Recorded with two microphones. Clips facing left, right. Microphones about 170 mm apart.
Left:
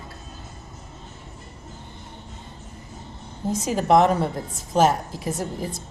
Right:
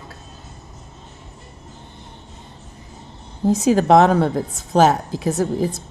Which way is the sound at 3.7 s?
90° right.